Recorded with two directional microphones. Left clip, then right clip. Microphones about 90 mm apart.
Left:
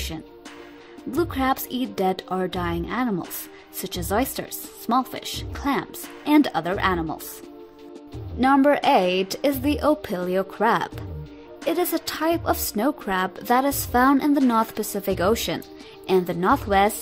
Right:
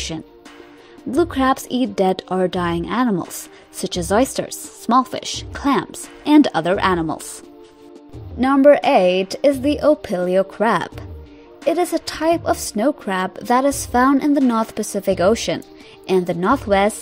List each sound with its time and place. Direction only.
1.1 s a woman's voice: 30° right (ahead or behind); by 7.2 s 60° right (ahead or behind)
8.4 s a woman's voice: 30° right (ahead or behind)
11.6 s a woman's voice: 35° right (ahead or behind)